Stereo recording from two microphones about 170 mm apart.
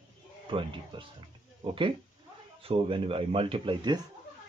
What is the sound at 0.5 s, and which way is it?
Speech, 30° right (ahead or behind).